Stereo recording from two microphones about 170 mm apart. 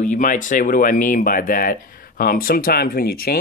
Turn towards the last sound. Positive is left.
turn(degrees=60)  # may be behind; listen again after turning